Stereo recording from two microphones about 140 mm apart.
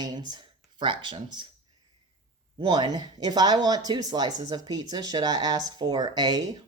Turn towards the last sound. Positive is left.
turn(degrees=-30)  # may be behind; listen again after turning